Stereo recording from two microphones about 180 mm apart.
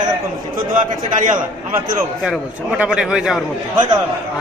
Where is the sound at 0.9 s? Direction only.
45° right (ahead or behind).